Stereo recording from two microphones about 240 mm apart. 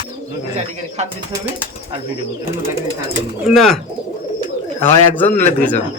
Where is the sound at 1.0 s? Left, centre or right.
Right.